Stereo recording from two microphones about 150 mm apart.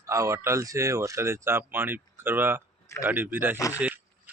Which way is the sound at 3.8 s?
10° right (ahead or behind).